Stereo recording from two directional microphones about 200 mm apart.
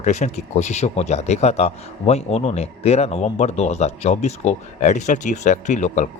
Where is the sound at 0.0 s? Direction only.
35° left (ahead or behind).